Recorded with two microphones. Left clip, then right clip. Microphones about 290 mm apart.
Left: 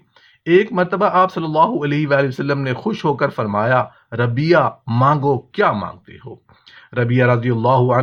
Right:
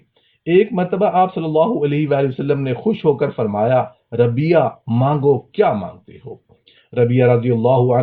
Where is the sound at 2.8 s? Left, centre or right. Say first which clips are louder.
Right 2 dB; left.